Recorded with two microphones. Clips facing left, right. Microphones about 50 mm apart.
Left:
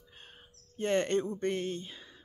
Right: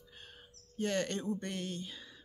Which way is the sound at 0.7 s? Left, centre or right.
Left.